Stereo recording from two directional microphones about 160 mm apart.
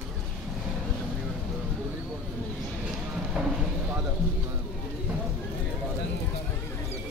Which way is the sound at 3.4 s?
5° right (ahead or behind).